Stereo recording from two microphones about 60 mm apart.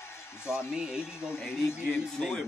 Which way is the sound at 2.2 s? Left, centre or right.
Centre.